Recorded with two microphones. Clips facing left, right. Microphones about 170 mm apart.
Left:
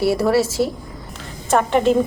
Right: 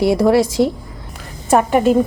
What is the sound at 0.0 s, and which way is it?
Speech, 15° right (ahead or behind).